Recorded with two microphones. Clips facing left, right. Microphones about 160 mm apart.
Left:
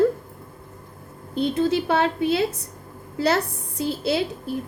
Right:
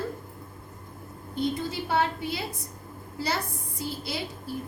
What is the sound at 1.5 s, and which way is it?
Speech, 75° left (ahead or behind).